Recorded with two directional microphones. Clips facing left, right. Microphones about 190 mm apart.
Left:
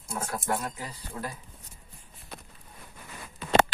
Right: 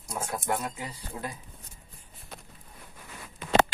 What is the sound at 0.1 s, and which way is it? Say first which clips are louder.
Speech: even; 20° right (ahead or behind).